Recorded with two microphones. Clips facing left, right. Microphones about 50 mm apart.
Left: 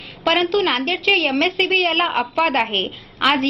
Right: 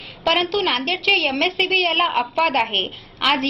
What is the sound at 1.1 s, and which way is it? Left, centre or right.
A woman's voice, centre.